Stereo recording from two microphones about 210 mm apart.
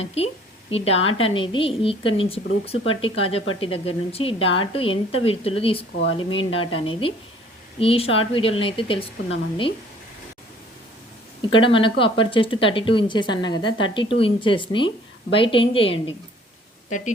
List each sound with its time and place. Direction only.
0.0 s speech: 30° left (ahead or behind)
11.5 s speech: 25° left (ahead or behind)